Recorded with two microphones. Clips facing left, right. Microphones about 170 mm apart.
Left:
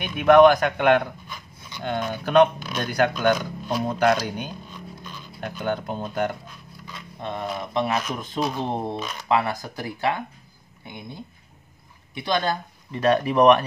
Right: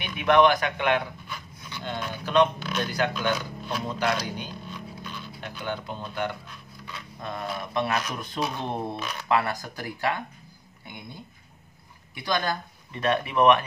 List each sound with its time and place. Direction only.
0.2 s speech: 50° left (ahead or behind)
7.2 s speech: 25° left (ahead or behind)
12.2 s speech: 25° left (ahead or behind)